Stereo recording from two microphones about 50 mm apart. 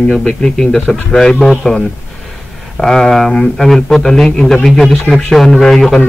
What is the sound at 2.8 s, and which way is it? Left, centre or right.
A man's voice, centre.